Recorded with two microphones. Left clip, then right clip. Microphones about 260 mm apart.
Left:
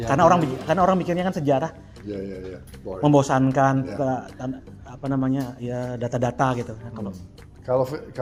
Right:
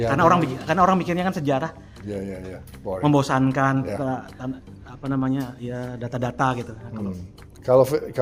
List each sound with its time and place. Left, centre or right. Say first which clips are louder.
0.1 s a man's voice: left 3 dB; centre
0.7 s speech: right 1 dB; centre
2.0 s speech: right 1 dB; right
3.0 s a man's voice: left 2 dB; centre
7.6 s speech: right 6 dB; right